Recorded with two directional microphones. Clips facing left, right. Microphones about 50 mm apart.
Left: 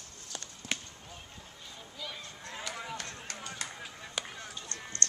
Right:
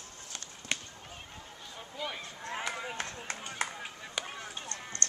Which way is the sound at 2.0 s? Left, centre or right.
Right.